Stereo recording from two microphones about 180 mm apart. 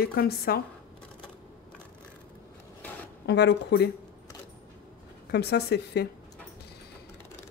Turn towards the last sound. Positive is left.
turn(degrees=65)  # may be behind; listen again after turning